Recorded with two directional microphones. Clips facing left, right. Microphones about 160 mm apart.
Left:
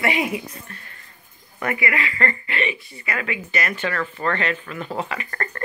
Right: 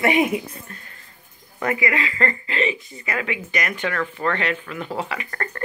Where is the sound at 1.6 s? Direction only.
20° right (ahead or behind).